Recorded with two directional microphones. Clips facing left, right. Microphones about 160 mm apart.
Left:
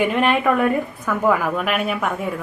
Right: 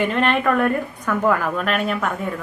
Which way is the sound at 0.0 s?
10° left (ahead or behind).